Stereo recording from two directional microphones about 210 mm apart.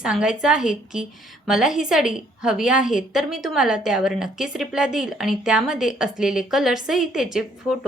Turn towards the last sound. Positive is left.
turn(degrees=0)  # may be behind; listen again after turning